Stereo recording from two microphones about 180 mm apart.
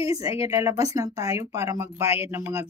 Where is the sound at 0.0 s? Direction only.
15° right (ahead or behind).